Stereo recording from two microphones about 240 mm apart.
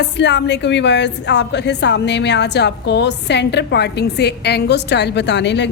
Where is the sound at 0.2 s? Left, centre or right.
Left.